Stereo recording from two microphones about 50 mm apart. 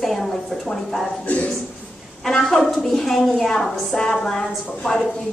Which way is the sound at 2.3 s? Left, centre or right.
Centre.